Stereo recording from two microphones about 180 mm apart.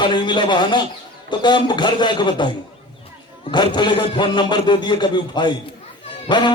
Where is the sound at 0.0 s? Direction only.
25° left (ahead or behind).